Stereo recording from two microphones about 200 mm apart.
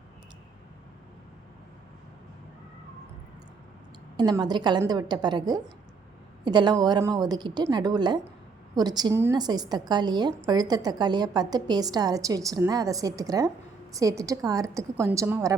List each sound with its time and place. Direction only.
4.2 s a woman's voice: 20° right (ahead or behind)